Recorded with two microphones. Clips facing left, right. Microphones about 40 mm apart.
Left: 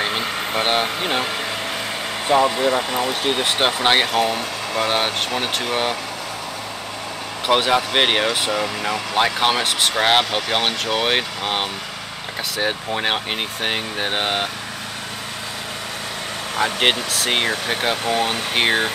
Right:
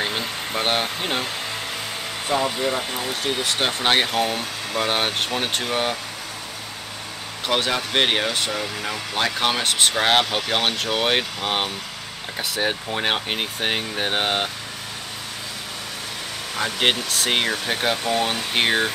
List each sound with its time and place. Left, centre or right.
0.7 s speech: centre
2.2 s speech: left
3.5 s speech: centre
7.4 s speech: centre
17.1 s speech: centre